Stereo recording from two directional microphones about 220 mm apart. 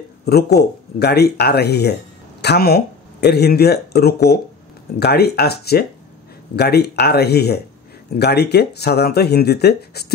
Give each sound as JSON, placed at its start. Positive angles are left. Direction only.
{"t": 0.2, "sound": "speech", "side_deg": 45}